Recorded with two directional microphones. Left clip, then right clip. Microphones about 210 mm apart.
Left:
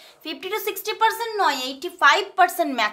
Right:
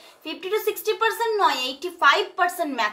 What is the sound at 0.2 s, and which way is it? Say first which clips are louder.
A woman's voice: right 2 dB; 35° left (ahead or behind).